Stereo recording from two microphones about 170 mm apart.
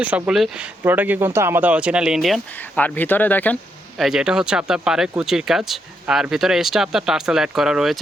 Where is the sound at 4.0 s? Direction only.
5° right (ahead or behind).